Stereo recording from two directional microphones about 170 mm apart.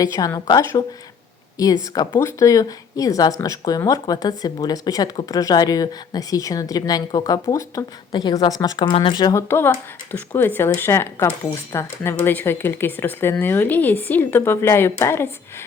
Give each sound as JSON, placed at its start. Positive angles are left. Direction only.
{"t": 0.0, "sound": "speech", "side_deg": 20}